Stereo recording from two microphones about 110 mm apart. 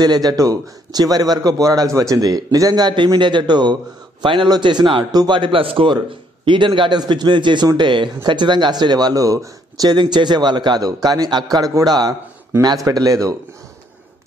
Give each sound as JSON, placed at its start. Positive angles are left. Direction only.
{"t": 0.0, "sound": "a man's voice", "side_deg": -40}